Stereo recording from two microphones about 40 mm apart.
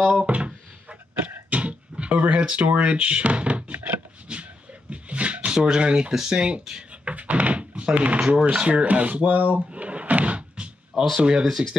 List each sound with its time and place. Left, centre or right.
0.0 s speech: right
0.3 s a sound: right
1.5 s speech: right
4.3 s a sound: right
5.8 s speech: right
7.1 s thunk: right
8.2 s speech: centre
8.5 s rub: right
9.2 s speech: right
9.7 s drawer open or close: right
10.9 s a sound: centre
11.4 s speech: centre